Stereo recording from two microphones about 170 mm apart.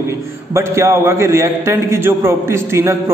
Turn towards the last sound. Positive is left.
turn(degrees=-15)  # may be behind; listen again after turning